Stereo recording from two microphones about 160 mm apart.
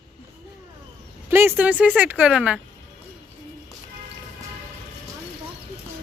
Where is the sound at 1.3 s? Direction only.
15° right (ahead or behind).